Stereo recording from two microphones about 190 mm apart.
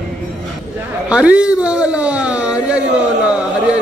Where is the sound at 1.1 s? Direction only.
5° right (ahead or behind).